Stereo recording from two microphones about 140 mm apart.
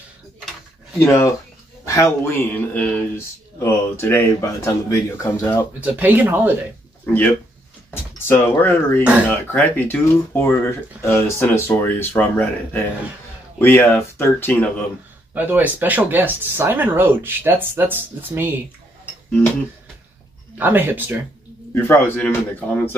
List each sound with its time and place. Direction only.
0.9 s speech: 15° left (ahead or behind)
5.8 s speech: 10° right (ahead or behind)
7.9 s speech: 15° left (ahead or behind)
15.3 s speech: 15° right (ahead or behind)
20.5 s speech: 15° right (ahead or behind)
21.8 s speech: 15° left (ahead or behind)